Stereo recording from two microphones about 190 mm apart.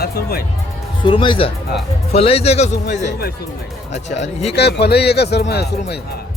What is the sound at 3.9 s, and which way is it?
Speech, 35° left (ahead or behind).